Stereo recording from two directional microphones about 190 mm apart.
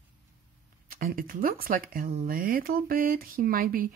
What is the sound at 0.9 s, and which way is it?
Speech, 50° right (ahead or behind).